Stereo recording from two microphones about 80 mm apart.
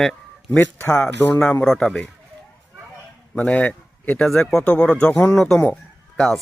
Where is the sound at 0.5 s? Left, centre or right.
Centre.